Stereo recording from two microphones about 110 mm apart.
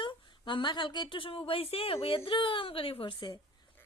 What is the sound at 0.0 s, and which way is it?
Speech, 45° left (ahead or behind).